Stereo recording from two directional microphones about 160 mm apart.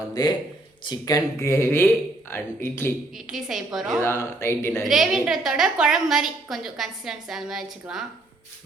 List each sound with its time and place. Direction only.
0.1 s speech: 25° left (ahead or behind)
3.2 s a woman's voice: 5° right (ahead or behind)
4.0 s speech: 15° left (ahead or behind)
4.8 s a woman's voice: centre (ahead or behind)